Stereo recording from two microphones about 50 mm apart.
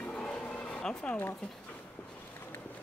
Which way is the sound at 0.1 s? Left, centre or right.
Left.